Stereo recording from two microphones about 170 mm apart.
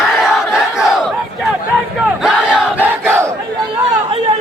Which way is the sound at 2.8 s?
15° right (ahead or behind).